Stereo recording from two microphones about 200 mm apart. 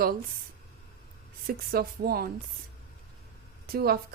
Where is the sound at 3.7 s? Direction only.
50° right (ahead or behind).